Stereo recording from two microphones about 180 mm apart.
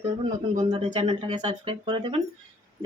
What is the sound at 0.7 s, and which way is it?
Speech, 30° right (ahead or behind).